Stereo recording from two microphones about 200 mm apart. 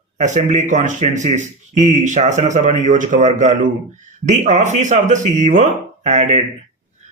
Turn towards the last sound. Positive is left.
turn(degrees=-35)  # may be behind; listen again after turning